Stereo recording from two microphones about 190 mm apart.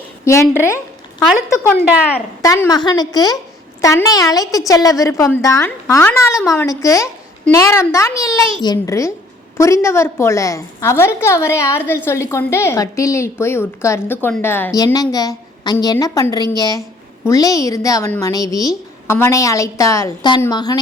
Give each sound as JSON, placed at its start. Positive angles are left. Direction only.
{"t": 0.3, "sound": "a woman's voice", "side_deg": 15}